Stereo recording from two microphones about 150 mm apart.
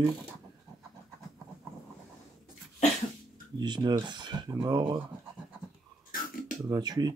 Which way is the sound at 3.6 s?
30° right (ahead or behind).